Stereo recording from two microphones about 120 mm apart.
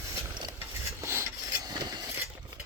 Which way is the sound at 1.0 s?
20° right (ahead or behind).